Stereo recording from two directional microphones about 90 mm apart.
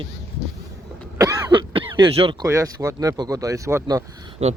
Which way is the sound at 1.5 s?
70° right (ahead or behind).